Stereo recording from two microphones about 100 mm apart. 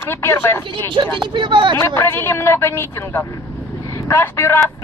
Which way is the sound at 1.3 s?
50° right (ahead or behind).